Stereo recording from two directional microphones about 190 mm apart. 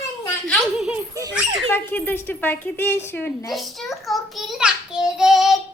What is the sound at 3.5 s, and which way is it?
A child's voice, centre (ahead or behind).